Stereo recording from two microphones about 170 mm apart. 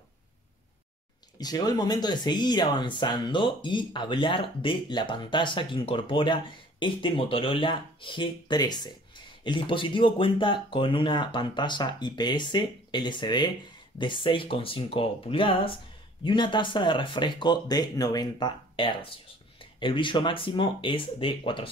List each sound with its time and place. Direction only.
1.4 s speech: 25° left (ahead or behind)